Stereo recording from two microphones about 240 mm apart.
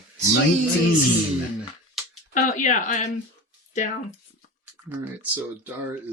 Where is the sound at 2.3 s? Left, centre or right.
Left.